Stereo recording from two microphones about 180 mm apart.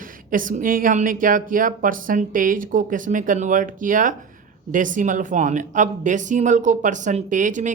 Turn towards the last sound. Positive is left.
turn(degrees=-45)  # may be behind; listen again after turning